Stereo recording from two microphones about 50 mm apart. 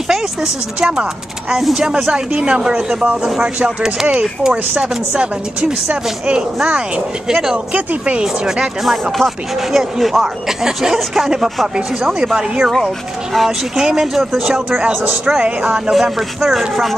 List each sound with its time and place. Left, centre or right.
0.7 s speech: centre
1.5 s speech: centre; by 8.3 s right
8.5 s speech: centre
9.1 s speech: centre